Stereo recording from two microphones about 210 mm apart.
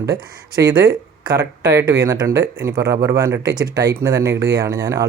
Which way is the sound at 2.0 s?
15° right (ahead or behind).